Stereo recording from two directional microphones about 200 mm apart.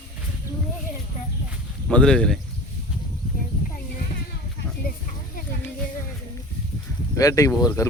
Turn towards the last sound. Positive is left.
turn(degrees=15)  # may be behind; listen again after turning